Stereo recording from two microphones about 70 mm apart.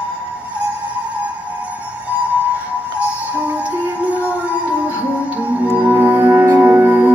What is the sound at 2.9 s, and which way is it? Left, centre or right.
Music, right.